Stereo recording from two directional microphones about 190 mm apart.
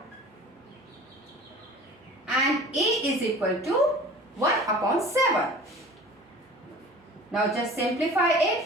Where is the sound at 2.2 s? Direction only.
Centre (ahead or behind).